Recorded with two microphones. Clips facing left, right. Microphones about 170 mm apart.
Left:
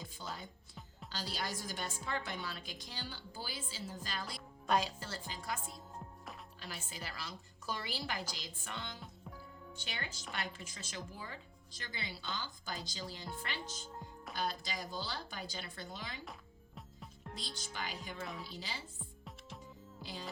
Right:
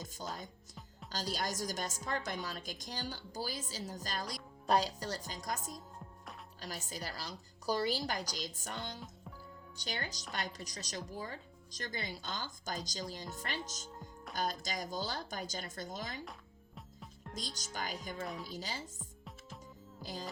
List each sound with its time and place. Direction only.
0.0 s music: 40° right (ahead or behind)
1.1 s a woman's voice: 45° right (ahead or behind)
17.3 s a woman's voice: 40° right (ahead or behind)
20.0 s music: 40° right (ahead or behind)